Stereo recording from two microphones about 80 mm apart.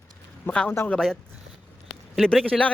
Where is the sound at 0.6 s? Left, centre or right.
Left.